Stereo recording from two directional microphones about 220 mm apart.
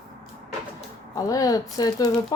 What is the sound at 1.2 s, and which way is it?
Speech, 15° left (ahead or behind).